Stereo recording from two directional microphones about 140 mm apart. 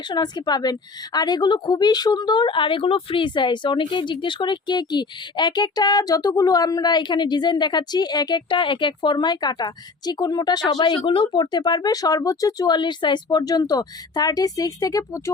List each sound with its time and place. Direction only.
0.1 s a woman's voice: 30° left (ahead or behind)